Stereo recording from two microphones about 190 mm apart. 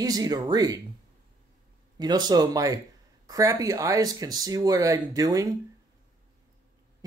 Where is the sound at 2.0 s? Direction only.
20° right (ahead or behind).